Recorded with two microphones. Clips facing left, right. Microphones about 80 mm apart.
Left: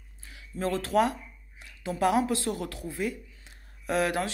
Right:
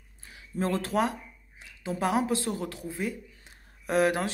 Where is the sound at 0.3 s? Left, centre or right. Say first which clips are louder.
Right 1 dB; right.